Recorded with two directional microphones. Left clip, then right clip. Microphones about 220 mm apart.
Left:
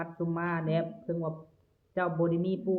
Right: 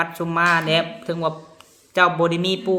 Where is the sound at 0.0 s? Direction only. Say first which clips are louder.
Right 15 dB; 20° right (ahead or behind).